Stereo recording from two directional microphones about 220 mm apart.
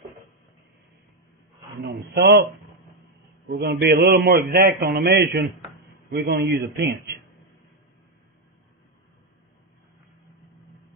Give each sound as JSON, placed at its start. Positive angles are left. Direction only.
{"t": 1.9, "sound": "a man's voice", "side_deg": -50}
{"t": 3.4, "sound": "a man's voice", "side_deg": -50}